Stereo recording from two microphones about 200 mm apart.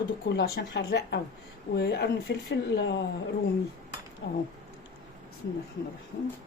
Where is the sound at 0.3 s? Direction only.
55° left (ahead or behind).